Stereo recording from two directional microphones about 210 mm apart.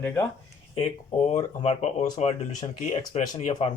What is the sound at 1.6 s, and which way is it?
Speech, 30° left (ahead or behind).